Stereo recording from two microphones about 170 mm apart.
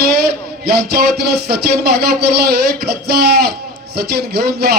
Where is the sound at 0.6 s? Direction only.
70° right (ahead or behind).